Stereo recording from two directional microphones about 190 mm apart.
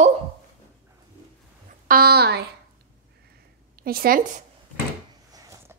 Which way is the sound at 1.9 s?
55° right (ahead or behind).